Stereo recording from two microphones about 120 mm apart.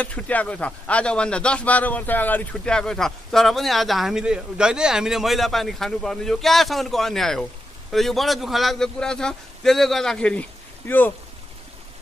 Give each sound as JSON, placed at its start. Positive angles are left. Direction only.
{"t": 0.0, "sound": "a man's voice", "side_deg": 10}